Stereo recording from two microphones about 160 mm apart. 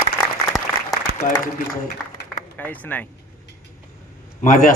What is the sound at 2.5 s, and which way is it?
Speech, 10° left (ahead or behind).